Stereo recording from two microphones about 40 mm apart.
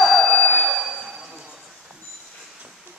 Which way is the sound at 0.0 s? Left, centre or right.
Centre.